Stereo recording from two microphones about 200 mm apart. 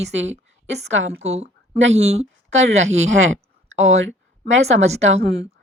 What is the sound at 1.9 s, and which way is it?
A woman's voice, 35° right (ahead or behind).